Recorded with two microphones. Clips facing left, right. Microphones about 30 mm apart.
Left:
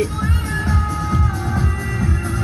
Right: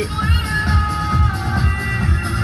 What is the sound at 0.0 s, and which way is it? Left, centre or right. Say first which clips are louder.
Music: right 1 dB; right.